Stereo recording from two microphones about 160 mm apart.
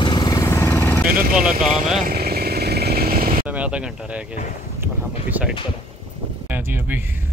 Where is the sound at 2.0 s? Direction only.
70° right (ahead or behind).